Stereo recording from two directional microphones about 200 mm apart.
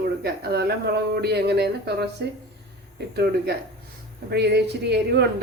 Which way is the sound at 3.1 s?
55° right (ahead or behind).